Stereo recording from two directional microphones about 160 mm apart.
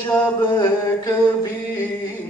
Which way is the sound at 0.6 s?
25° left (ahead or behind).